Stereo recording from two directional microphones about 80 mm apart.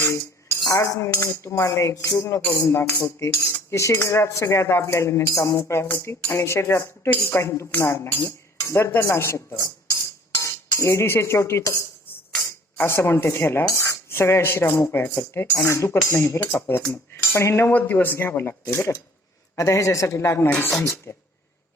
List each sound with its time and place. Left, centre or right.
0.0 s cutlery: left
8.7 s speech: left
9.0 s cutlery: left
10.7 s cutlery: left
12.4 s speech: left
15.6 s cutlery: left
16.5 s speech: left
17.7 s speech: left
19.5 s cutlery: left
20.5 s speech: centre
20.7 s cutlery: left